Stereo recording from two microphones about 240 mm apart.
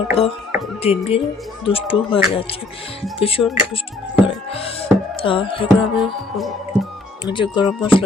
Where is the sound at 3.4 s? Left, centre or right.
Centre.